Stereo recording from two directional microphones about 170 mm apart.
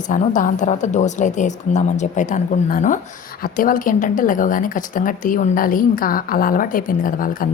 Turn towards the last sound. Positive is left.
turn(degrees=55)  # may be behind; listen again after turning